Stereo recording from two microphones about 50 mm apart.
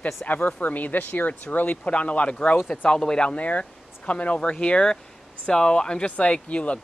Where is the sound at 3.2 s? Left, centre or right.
Left.